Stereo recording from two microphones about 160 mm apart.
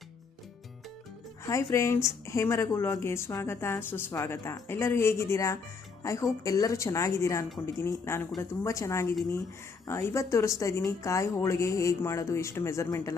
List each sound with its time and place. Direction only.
1.5 s speech: 20° left (ahead or behind)